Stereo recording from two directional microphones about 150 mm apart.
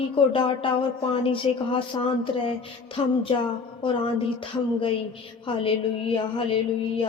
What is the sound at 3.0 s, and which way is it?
Speech, 35° left (ahead or behind).